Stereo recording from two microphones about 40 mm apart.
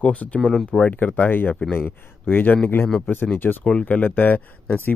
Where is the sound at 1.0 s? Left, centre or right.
Left.